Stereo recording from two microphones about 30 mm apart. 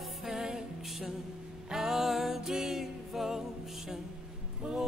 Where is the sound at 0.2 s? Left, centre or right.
Centre.